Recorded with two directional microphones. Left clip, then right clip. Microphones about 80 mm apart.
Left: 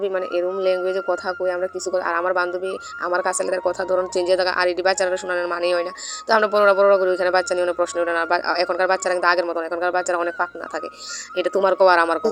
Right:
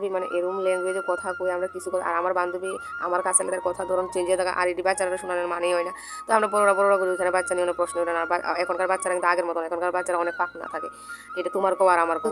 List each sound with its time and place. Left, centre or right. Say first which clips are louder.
0.0 s speech: left 4 dB; left